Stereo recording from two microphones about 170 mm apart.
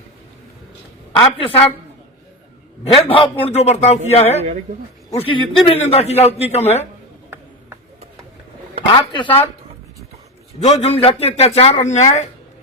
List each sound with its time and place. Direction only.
1.4 s a man's voice: 35° left (ahead or behind)
2.8 s a man's voice: 30° left (ahead or behind)
9.0 s a man's voice: 30° left (ahead or behind)
10.6 s a man's voice: 40° left (ahead or behind)